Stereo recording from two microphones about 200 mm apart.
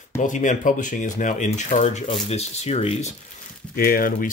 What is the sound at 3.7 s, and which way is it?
Speech, 45° left (ahead or behind).